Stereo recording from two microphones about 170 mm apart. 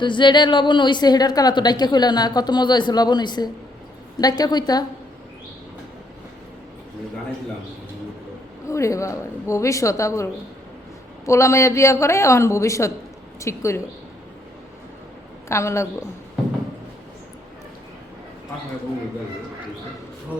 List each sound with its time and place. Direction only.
0.0 s a woman's voice: 30° left (ahead or behind)
8.6 s a woman's voice: 20° left (ahead or behind)
11.3 s a woman's voice: 15° left (ahead or behind)
15.4 s a woman's voice: 15° left (ahead or behind)